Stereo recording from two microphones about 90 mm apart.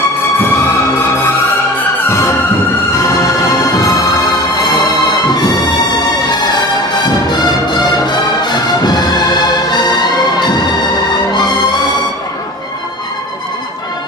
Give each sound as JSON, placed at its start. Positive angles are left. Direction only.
{"t": 2.0, "sound": "music", "side_deg": 30}
{"t": 4.6, "sound": "music", "side_deg": 45}
{"t": 8.4, "sound": "music", "side_deg": 50}